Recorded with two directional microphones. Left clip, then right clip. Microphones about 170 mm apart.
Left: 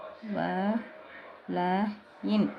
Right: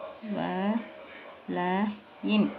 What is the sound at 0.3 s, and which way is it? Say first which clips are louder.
Speech: left 1 dB; 15° left (ahead or behind).